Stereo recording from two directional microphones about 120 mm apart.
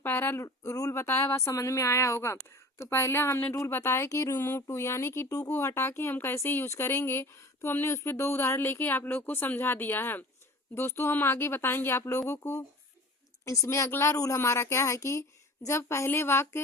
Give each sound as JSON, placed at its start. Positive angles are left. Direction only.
{"t": 0.0, "sound": "speech", "side_deg": 20}